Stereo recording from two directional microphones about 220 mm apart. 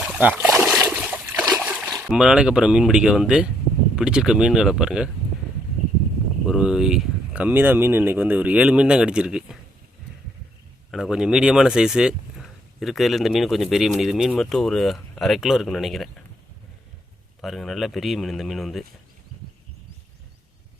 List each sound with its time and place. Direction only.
0.0 s splash: 5° right (ahead or behind)
0.5 s trickle: centre (ahead or behind)
1.5 s speech: 10° right (ahead or behind)
6.4 s speech: 5° right (ahead or behind)
10.9 s speech: centre (ahead or behind)
17.4 s speech: centre (ahead or behind)